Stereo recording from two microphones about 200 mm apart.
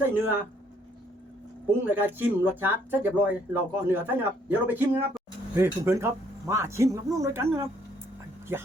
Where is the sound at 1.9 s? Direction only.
10° right (ahead or behind).